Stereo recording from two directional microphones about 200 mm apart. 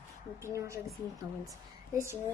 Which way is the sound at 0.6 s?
15° right (ahead or behind).